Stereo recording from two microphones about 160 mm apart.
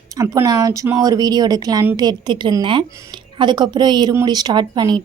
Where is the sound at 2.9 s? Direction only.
20° right (ahead or behind).